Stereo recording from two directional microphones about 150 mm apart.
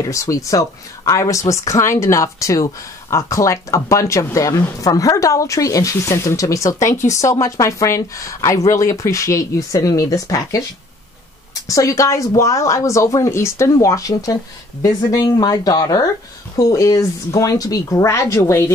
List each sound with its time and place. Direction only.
0.0 s speech: 20° left (ahead or behind)
11.6 s speech: 20° left (ahead or behind)